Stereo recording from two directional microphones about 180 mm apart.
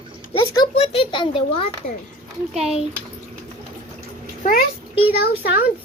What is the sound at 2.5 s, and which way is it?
Speech, 5° right (ahead or behind).